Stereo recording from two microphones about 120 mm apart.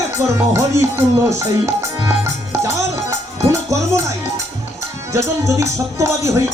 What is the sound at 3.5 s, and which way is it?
Speech, 25° right (ahead or behind).